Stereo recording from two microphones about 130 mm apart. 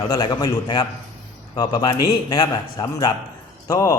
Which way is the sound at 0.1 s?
30° left (ahead or behind).